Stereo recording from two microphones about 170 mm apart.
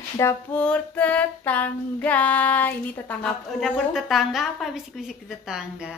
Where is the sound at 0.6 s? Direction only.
10° left (ahead or behind).